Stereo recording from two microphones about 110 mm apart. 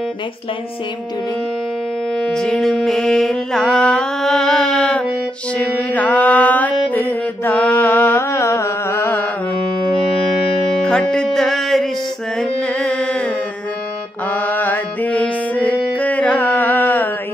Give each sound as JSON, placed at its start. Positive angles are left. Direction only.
{"t": 2.1, "sound": "music", "side_deg": 5}
{"t": 10.8, "sound": "music", "side_deg": 5}
{"t": 12.4, "sound": "carnatic music", "side_deg": 10}
{"t": 14.3, "sound": "music", "side_deg": 15}